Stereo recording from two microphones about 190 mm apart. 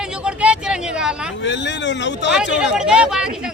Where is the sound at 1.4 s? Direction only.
70° left (ahead or behind).